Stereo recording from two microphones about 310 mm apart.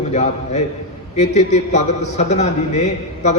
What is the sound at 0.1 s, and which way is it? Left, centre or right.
A man's voice, left.